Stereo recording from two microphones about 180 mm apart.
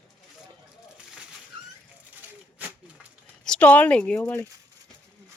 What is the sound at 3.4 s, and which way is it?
Speech, 5° left (ahead or behind).